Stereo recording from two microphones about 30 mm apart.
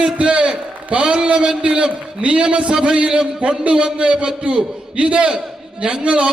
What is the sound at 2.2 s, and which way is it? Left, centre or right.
A man's voice, right.